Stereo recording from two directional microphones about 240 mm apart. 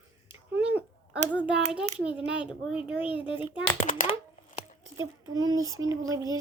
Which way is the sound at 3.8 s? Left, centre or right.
Left.